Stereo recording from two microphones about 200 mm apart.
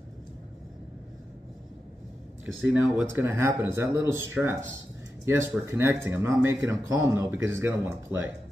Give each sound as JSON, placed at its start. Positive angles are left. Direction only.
{"t": 2.4, "sound": "speech", "side_deg": -10}